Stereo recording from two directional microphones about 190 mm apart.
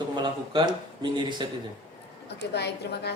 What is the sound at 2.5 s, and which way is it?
Speech, 60° left (ahead or behind).